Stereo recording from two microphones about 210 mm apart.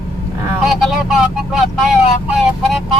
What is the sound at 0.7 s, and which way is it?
Speech, centre (ahead or behind).